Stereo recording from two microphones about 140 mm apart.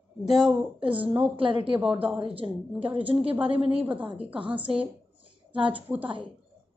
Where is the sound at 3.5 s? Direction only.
10° right (ahead or behind).